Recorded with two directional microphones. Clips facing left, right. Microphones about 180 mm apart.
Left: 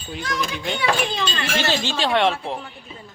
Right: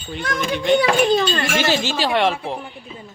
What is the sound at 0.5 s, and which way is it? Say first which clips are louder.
Speech: right 11 dB; centre (ahead or behind).